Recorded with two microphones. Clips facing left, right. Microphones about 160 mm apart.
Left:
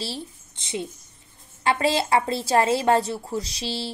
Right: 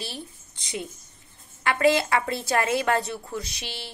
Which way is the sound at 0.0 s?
30° left (ahead or behind).